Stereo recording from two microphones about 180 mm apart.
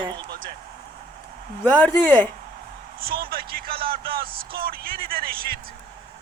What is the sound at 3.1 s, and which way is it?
A man's voice, 55° right (ahead or behind).